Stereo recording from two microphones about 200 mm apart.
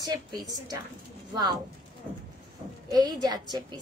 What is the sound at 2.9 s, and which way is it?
Speech, 20° right (ahead or behind).